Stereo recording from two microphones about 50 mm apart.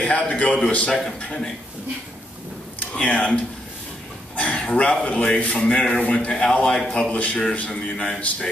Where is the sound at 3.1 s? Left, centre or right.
Left.